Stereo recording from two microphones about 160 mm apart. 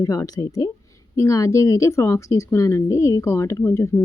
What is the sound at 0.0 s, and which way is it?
A woman's voice, 20° left (ahead or behind).